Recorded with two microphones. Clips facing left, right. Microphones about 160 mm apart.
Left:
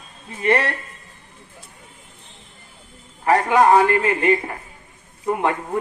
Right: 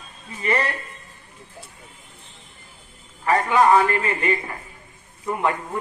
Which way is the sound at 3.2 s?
60° left (ahead or behind).